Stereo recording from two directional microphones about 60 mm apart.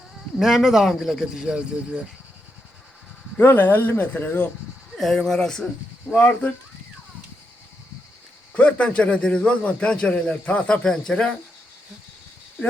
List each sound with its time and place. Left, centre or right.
0.3 s speech: centre
1.4 s speech: centre
3.3 s speech: left
4.9 s a man's voice: centre
6.1 s speech: left
8.5 s a man's voice: left